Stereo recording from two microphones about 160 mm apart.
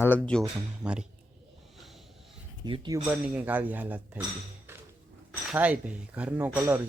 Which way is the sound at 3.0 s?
10° right (ahead or behind).